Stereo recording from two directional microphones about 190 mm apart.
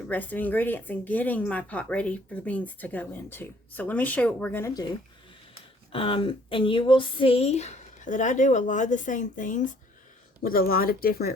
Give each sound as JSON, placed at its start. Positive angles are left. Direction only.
{"t": 0.1, "sound": "speech", "side_deg": 10}
{"t": 5.9, "sound": "speech", "side_deg": 30}